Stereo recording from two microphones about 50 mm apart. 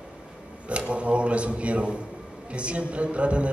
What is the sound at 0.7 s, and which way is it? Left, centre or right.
A man's voice, right.